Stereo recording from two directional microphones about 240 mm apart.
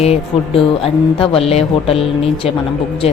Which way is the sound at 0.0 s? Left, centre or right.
Left.